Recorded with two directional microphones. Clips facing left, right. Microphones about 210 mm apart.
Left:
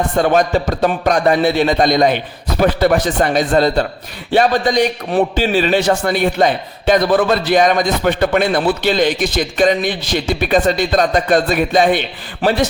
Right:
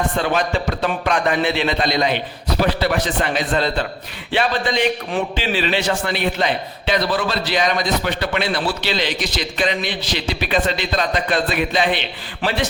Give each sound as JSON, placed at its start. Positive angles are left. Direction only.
{"t": 0.2, "sound": "a man's voice", "side_deg": 45}